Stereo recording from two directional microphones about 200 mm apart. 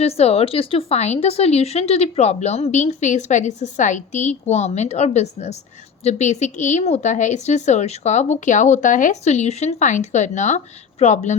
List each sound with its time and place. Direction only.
0.0 s speech: 30° left (ahead or behind)